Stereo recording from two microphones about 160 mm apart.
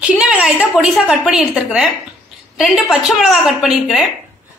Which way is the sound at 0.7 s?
5° right (ahead or behind).